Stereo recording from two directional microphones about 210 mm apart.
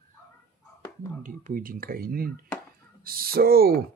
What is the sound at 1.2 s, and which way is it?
Speech, 40° right (ahead or behind).